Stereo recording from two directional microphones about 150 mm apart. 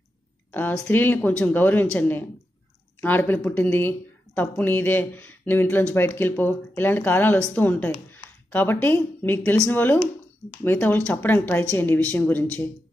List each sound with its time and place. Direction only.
0.5 s a woman's voice: 10° left (ahead or behind)